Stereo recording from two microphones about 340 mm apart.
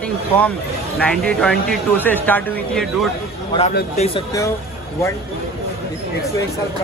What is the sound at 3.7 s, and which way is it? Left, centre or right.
Speech, centre.